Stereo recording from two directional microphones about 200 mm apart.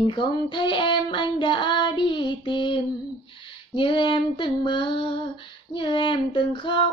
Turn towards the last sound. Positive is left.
turn(degrees=25)  # may be behind; listen again after turning